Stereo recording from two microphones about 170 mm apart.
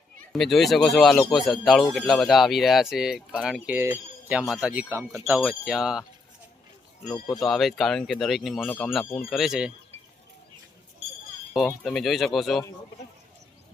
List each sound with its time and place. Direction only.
0.3 s speech: centre (ahead or behind); by 5.4 s 15° right (ahead or behind)
5.4 s speech: centre (ahead or behind)
7.1 s speech: centre (ahead or behind)
11.5 s speech: centre (ahead or behind)